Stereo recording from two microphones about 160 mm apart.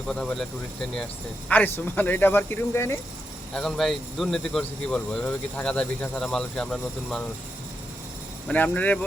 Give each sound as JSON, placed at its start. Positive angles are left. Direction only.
{"t": 0.1, "sound": "speech", "side_deg": 5}
{"t": 3.5, "sound": "speech", "side_deg": 0}
{"t": 8.4, "sound": "speech", "side_deg": 10}